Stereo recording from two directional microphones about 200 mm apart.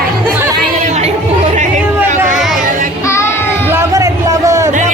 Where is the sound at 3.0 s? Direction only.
15° left (ahead or behind).